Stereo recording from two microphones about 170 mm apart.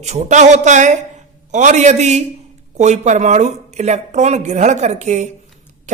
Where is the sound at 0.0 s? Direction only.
40° right (ahead or behind).